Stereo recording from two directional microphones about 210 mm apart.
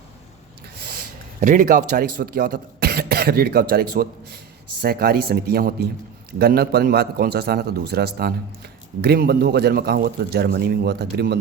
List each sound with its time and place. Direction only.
0.8 s a man's voice: 45° right (ahead or behind)